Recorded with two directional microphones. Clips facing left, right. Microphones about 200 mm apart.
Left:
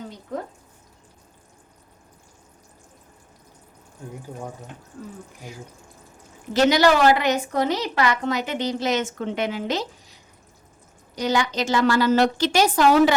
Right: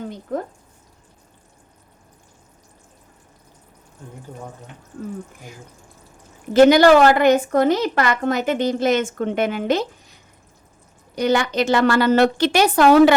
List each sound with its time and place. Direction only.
0.3 s a woman's voice: 50° right (ahead or behind)
5.0 s a woman's voice: 50° right (ahead or behind)
6.5 s a woman's voice: 50° right (ahead or behind)